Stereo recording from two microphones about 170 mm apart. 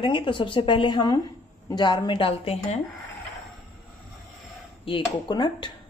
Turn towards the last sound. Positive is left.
turn(degrees=25)  # may be behind; listen again after turning